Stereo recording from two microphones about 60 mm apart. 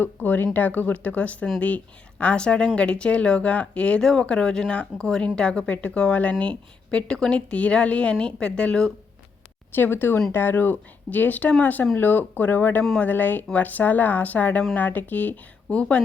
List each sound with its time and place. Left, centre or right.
0.0 s a woman's voice: left; by 8.9 s centre
9.7 s a woman's voice: left
15.7 s a woman's voice: left